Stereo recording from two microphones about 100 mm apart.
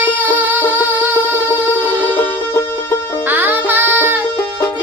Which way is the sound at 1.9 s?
15° left (ahead or behind).